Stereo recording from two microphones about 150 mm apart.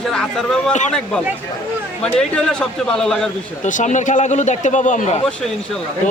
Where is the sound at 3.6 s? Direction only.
55° left (ahead or behind).